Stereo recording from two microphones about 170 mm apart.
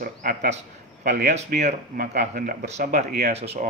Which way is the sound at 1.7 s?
55° right (ahead or behind).